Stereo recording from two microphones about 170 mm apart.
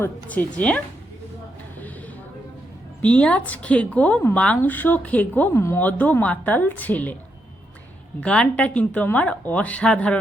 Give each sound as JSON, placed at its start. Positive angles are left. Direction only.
{"t": 0.0, "sound": "speech", "side_deg": 10}
{"t": 3.0, "sound": "speech", "side_deg": 5}
{"t": 8.2, "sound": "speech", "side_deg": 5}